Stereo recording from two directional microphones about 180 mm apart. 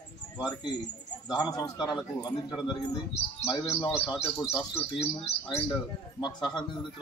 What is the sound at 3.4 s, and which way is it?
A man's voice, 25° left (ahead or behind).